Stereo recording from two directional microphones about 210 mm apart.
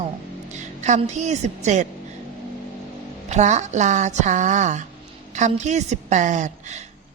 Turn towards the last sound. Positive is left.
turn(degrees=-35)  # may be behind; listen again after turning